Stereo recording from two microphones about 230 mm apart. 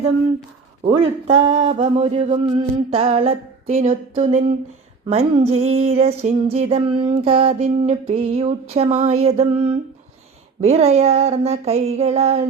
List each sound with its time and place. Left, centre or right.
0.9 s female singing: right